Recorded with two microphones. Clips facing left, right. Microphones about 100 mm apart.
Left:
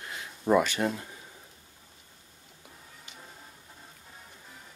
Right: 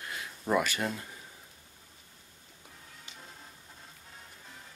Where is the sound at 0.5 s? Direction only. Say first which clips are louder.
Left 5 dB; 20° left (ahead or behind).